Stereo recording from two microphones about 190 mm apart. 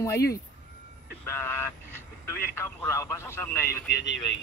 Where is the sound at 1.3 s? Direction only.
10° left (ahead or behind).